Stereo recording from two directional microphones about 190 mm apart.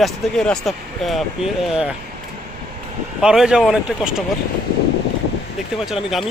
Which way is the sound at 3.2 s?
5° right (ahead or behind).